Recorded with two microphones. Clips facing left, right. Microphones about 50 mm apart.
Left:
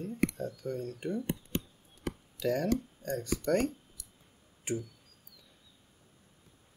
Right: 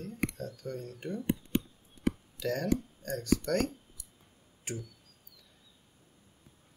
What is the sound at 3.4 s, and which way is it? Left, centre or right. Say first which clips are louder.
Speech: left 2 dB; centre.